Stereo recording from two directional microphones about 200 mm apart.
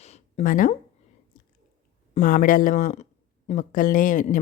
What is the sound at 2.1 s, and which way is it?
Speech, 40° left (ahead or behind).